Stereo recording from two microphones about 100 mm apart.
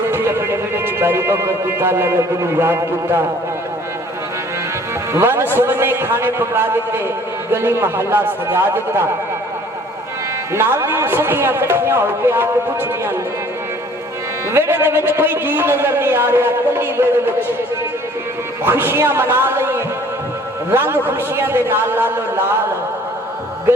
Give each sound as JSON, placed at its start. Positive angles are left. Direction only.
{"t": 0.1, "sound": "speech", "side_deg": -25}
{"t": 5.1, "sound": "a man's voice", "side_deg": -25}
{"t": 10.5, "sound": "a man's voice", "side_deg": -25}
{"t": 14.5, "sound": "a man's voice", "side_deg": -25}
{"t": 18.6, "sound": "a man's voice", "side_deg": -25}